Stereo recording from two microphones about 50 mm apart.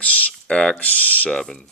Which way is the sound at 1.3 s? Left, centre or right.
Centre.